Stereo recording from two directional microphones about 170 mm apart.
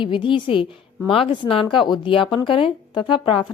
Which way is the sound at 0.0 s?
30° left (ahead or behind).